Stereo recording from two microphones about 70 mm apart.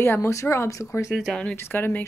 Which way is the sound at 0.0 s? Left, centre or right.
Left.